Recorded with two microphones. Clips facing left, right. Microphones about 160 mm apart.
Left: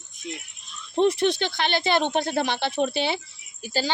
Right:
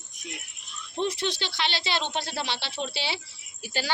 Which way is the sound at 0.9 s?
60° left (ahead or behind).